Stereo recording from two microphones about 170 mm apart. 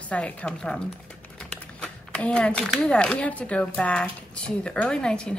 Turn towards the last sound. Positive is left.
turn(degrees=5)  # may be behind; listen again after turning